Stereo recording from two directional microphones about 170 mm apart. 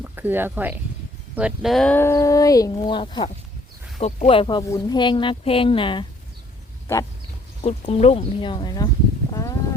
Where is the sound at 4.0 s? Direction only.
40° left (ahead or behind).